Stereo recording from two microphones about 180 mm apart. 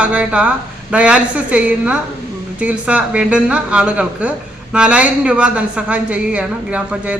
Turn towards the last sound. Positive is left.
turn(degrees=-5)  # may be behind; listen again after turning